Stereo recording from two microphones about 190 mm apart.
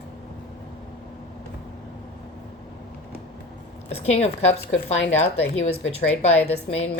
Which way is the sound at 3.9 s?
30° left (ahead or behind).